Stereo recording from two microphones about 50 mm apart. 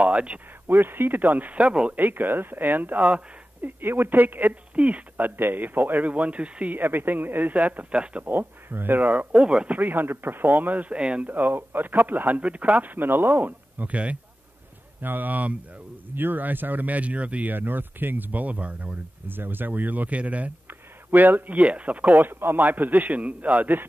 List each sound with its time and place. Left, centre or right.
0.0 s speech: right
0.7 s speech: right
2.0 s speech: right
3.6 s speech: right
6.8 s speech: right
8.2 s speech: right; by 9.8 s centre
9.8 s speech: right
11.0 s speech: right
11.2 s speech: right
15.0 s speech: right
17.6 s speech: right
20.6 s speech: right
22.1 s speech: right